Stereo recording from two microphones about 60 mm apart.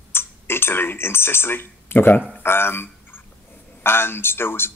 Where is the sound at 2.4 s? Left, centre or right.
Left.